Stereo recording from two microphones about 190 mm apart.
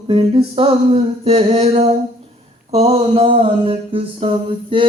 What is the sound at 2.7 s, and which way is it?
Mantra, 35° right (ahead or behind).